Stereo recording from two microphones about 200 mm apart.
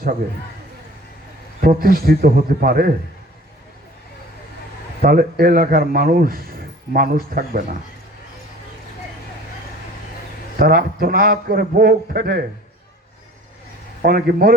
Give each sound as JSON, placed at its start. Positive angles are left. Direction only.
{"t": 1.6, "sound": "a man's voice", "side_deg": -45}
{"t": 5.0, "sound": "a man's voice", "side_deg": -45}
{"t": 10.6, "sound": "a man's voice", "side_deg": -50}
{"t": 14.0, "sound": "a man's voice", "side_deg": -50}